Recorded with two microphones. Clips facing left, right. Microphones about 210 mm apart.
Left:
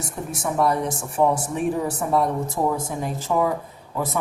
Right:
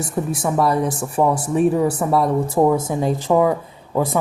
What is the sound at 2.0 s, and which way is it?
Speech, 85° right.